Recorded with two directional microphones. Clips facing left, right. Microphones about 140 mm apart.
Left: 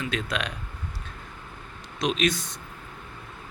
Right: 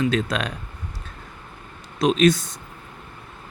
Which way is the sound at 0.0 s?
40° right (ahead or behind).